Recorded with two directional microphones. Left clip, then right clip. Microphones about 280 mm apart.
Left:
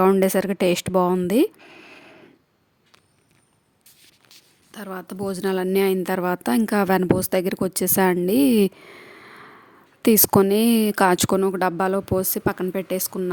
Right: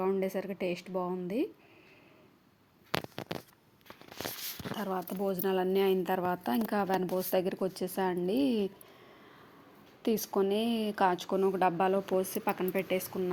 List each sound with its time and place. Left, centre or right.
0.0 s speech: left
4.9 s speech: left
10.0 s speech: left